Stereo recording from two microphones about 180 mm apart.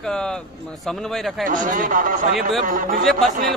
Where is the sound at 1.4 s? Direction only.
50° right (ahead or behind).